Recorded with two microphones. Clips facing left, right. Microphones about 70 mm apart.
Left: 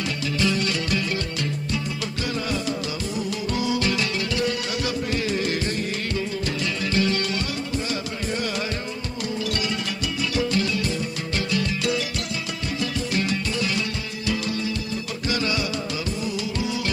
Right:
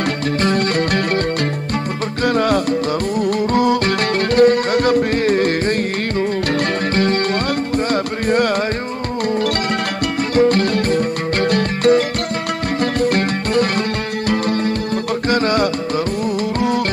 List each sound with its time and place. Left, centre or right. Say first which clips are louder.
0.4 s music: right 6 dB; right
2.2 s music: right 12 dB; right
6.9 s music: right 4 dB; right
10.3 s music: right 11 dB; right
13.0 s music: right 8 dB; right